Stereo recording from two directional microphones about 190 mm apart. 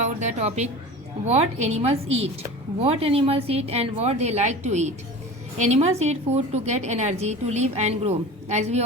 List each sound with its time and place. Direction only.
0.0 s a woman's voice: 40° right (ahead or behind)